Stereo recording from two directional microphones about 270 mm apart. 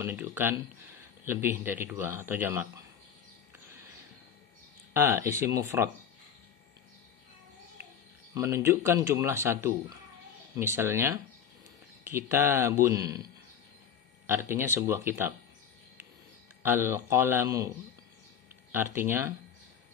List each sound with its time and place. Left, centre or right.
0.0 s a man's voice: centre
4.9 s a man's voice: centre
8.4 s a man's voice: centre
16.6 s a man's voice: centre